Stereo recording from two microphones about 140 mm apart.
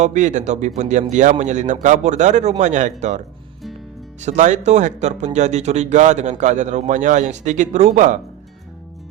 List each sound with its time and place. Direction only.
0.0 s speech: 60° right (ahead or behind)
4.2 s speech: 55° right (ahead or behind)